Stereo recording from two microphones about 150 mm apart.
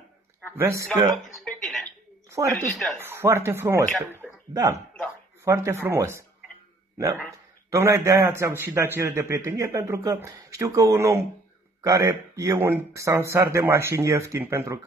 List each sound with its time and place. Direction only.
0.6 s speech: 20° right (ahead or behind)
1.3 s a sound: centre (ahead or behind)
2.2 s a sound: 20° right (ahead or behind)
2.5 s speech: centre (ahead or behind)
3.0 s speech: 15° right (ahead or behind)
7.2 s a man's voice: 20° right (ahead or behind)